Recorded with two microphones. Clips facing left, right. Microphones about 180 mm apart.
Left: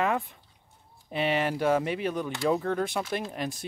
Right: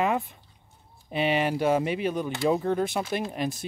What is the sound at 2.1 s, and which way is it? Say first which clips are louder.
Speech: right 1 dB; 20° right (ahead or behind).